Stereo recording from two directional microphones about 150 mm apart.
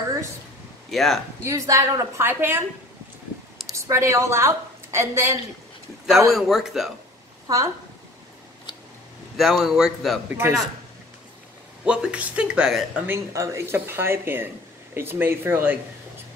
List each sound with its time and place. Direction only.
0.8 s speech: centre (ahead or behind)
1.4 s a woman's voice: 20° right (ahead or behind)
3.7 s a woman's voice: 20° right (ahead or behind)
6.3 s a man's voice: centre (ahead or behind)
7.4 s a woman's voice: 20° right (ahead or behind)
9.4 s a man's voice: centre (ahead or behind)
10.3 s speech: 15° right (ahead or behind)
11.8 s speech: 5° right (ahead or behind)